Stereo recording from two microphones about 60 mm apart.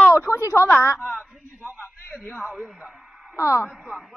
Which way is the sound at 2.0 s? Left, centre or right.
Left.